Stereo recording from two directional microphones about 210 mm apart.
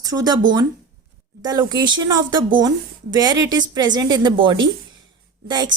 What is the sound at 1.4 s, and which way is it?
A woman's voice, 20° right (ahead or behind).